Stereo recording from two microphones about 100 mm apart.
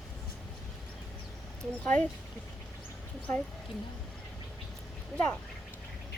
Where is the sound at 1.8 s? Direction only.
10° left (ahead or behind).